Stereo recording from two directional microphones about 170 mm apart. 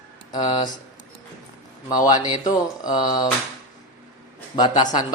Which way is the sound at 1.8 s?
20° left (ahead or behind).